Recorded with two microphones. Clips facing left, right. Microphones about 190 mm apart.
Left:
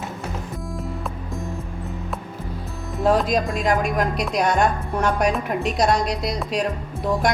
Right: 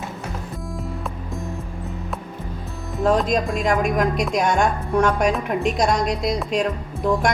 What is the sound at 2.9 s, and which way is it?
A woman's voice, 5° left (ahead or behind).